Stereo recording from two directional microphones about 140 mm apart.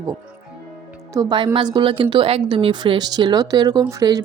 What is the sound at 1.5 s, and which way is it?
Speech, 35° right (ahead or behind).